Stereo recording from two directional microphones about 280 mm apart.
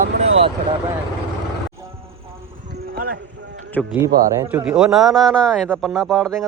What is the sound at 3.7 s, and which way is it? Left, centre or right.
A man's voice, centre.